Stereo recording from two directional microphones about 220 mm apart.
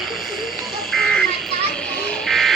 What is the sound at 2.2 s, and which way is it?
Buzzer, centre (ahead or behind).